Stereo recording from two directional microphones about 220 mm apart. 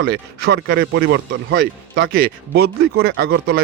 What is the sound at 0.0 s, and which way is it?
Speech, 45° right (ahead or behind).